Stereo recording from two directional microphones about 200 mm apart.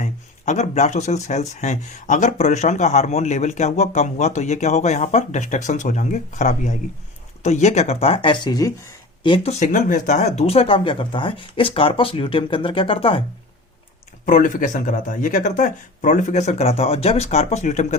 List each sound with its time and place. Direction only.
0.0 s speech: 35° left (ahead or behind); by 9.3 s 15° left (ahead or behind)
9.3 s speech: 30° left (ahead or behind)
14.3 s speech: 40° left (ahead or behind)